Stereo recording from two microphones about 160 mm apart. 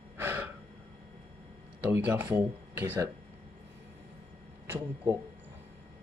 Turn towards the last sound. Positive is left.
turn(degrees=-15)  # may be behind; listen again after turning